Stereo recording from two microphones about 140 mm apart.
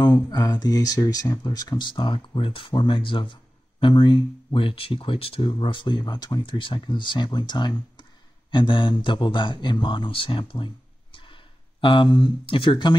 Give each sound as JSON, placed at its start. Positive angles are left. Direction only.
{"t": 0.0, "sound": "speech", "side_deg": 30}